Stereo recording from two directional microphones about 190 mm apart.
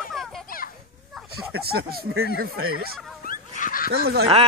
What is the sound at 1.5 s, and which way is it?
Speech, 55° right (ahead or behind).